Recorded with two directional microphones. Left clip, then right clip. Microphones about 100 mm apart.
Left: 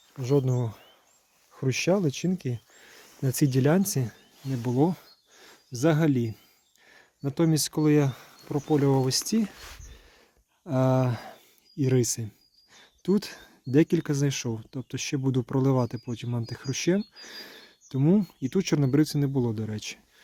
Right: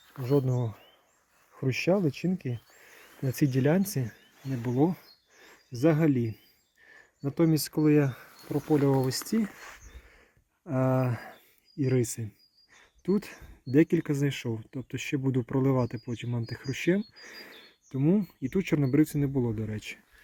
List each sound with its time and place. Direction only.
0.3 s speech: 35° left (ahead or behind)
2.8 s speech: 50° left (ahead or behind)
4.5 s speech: 30° left (ahead or behind)
7.4 s speech: 30° left (ahead or behind); by 9.5 s 15° left (ahead or behind)
10.7 s speech: 25° left (ahead or behind)
12.7 s a sound: 40° left (ahead or behind)
13.7 s speech: 30° left (ahead or behind)
14.1 s speech: 20° left (ahead or behind)
16.0 s speech: 35° left (ahead or behind)
16.5 s speech: 20° left (ahead or behind)